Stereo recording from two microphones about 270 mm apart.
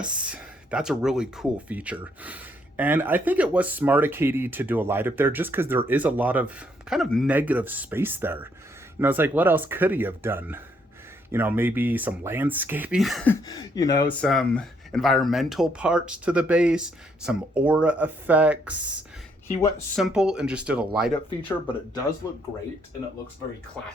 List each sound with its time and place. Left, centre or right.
0.3 s speech: centre
13.5 s speech: centre
20.0 s speech: centre